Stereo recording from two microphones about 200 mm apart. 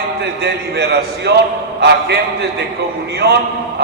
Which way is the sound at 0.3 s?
55° right (ahead or behind).